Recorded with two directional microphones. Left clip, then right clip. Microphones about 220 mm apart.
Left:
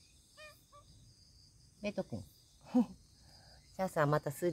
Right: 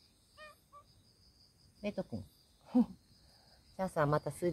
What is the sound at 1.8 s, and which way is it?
Speech, 10° right (ahead or behind).